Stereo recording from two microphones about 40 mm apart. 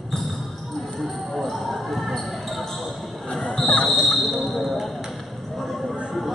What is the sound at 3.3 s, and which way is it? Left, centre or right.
Basketball bounce, left.